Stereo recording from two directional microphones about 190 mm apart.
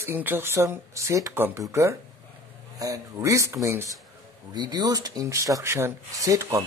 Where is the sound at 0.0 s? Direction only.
10° right (ahead or behind).